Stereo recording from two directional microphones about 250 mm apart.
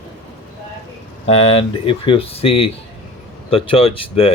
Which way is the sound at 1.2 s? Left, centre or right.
Left.